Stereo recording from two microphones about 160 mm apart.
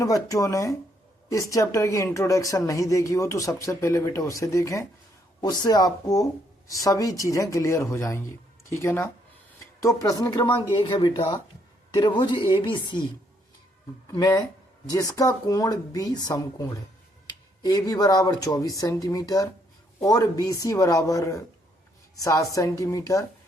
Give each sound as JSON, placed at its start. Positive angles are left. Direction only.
{"t": 0.0, "sound": "a woman's voice", "side_deg": 20}
{"t": 11.1, "sound": "a woman's voice", "side_deg": 20}
{"t": 14.1, "sound": "a woman's voice", "side_deg": 20}